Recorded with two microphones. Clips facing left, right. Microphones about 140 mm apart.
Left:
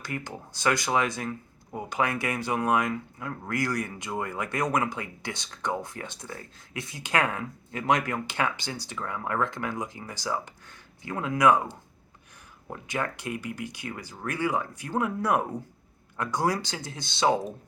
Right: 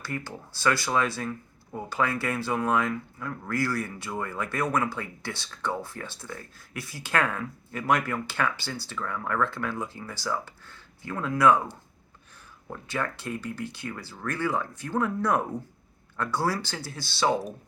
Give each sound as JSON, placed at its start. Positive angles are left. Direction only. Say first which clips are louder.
{"t": 0.0, "sound": "speech", "louder": "even", "side_deg": 15}